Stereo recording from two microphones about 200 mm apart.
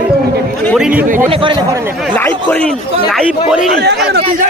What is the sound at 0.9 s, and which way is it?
Speech, 40° right (ahead or behind).